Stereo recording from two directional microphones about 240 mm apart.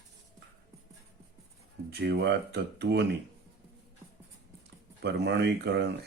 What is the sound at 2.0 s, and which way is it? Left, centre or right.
Speech, right.